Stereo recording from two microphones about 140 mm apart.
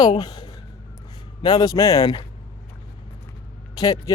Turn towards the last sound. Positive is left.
turn(degrees=25)  # may be behind; listen again after turning